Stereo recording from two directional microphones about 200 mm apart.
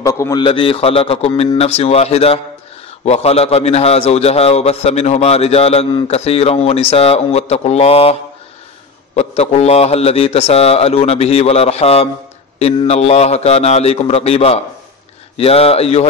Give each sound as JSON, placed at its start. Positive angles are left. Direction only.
{"t": 0.0, "sound": "a man's voice", "side_deg": 15}